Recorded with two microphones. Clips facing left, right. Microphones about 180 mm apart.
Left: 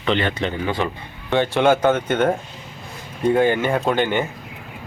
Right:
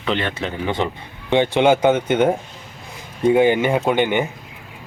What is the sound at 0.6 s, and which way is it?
Speech, 20° right (ahead or behind).